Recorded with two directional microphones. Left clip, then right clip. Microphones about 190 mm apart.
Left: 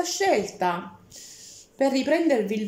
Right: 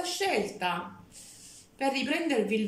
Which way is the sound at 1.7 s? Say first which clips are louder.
Left 7 dB; 30° left (ahead or behind).